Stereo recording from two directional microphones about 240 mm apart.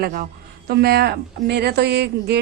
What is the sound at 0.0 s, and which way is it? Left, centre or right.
A woman's voice, right.